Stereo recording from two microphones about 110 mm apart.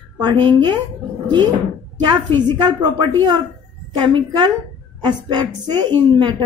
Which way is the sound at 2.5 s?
40° right (ahead or behind).